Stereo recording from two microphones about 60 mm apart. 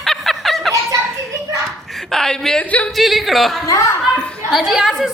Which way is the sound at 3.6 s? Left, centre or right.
Left.